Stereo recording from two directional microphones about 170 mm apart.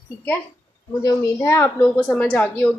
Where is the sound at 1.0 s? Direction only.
15° left (ahead or behind).